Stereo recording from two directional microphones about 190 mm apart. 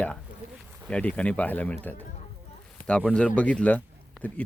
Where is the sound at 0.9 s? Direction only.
5° left (ahead or behind).